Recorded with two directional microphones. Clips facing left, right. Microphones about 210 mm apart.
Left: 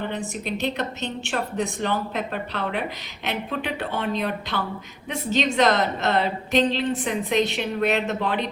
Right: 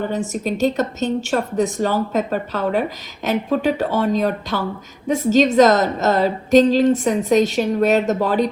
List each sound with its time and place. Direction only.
0.4 s a woman's voice: 45° right (ahead or behind)